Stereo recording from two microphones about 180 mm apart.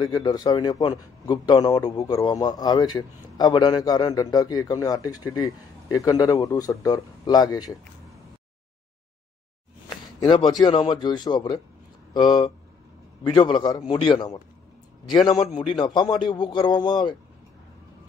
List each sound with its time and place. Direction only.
0.0 s a man's voice: 20° left (ahead or behind)
10.6 s a man's voice: 25° left (ahead or behind)